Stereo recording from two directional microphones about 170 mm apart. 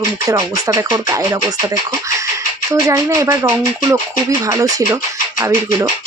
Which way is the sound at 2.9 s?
15° right (ahead or behind).